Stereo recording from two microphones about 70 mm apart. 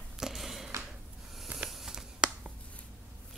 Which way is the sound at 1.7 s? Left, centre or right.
Centre.